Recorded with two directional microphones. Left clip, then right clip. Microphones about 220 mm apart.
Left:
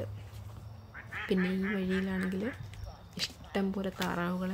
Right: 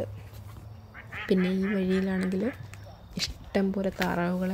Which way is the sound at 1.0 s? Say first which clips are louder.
Right 2 dB; 45° right (ahead or behind).